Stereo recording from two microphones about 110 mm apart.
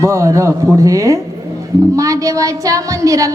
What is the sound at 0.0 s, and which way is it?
A woman's voice, 30° right (ahead or behind).